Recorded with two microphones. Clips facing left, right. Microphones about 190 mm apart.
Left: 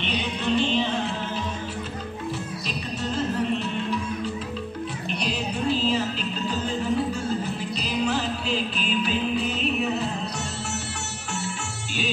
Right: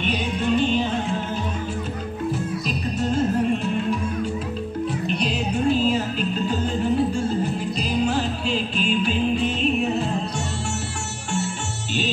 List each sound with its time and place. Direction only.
0.0 s music: 45° right (ahead or behind)
3.0 s music: 45° right (ahead or behind)
5.5 s music: 45° right (ahead or behind)
8.0 s music: 40° right (ahead or behind)